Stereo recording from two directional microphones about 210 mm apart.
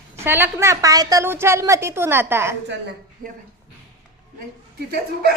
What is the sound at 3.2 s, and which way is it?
Speech, 40° right (ahead or behind).